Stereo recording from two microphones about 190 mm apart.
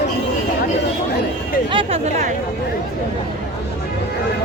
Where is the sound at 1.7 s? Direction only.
30° right (ahead or behind).